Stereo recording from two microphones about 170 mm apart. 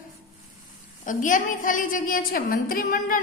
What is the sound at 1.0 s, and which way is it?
A woman's voice, 50° left (ahead or behind).